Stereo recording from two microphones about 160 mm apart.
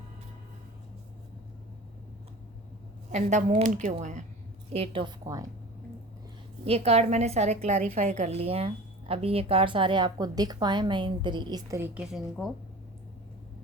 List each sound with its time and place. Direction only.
3.1 s a woman's voice: 50° right (ahead or behind)
4.7 s a woman's voice: 35° right (ahead or behind)
5.2 s a woman's voice: 20° right (ahead or behind)
6.7 s a woman's voice: 40° right (ahead or behind)
11.8 s a woman's voice: 5° right (ahead or behind)